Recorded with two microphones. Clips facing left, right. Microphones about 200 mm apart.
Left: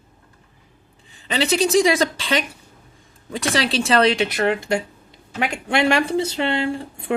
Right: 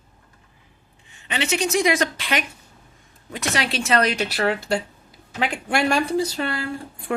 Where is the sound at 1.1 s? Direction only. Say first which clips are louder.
Left 4 dB; 35° left (ahead or behind).